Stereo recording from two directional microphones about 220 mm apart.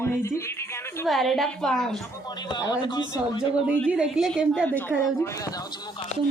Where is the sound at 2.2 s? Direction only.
20° left (ahead or behind).